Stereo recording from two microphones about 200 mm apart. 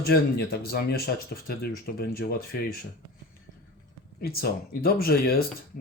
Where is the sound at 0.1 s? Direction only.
50° left (ahead or behind).